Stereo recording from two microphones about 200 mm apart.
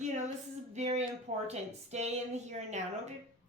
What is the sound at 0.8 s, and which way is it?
A woman's voice, 30° right (ahead or behind).